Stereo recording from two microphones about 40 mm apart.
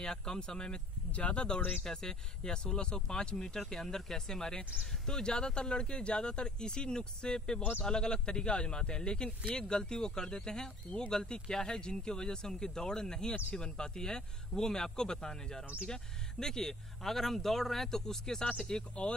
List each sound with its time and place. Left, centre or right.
0.0 s speech: centre
1.6 s speech: left
1.9 s speech: centre